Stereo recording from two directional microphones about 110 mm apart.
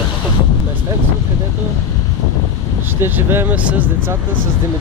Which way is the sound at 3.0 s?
20° right (ahead or behind).